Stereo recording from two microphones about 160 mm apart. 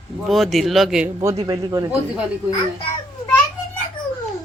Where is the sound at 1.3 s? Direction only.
30° right (ahead or behind).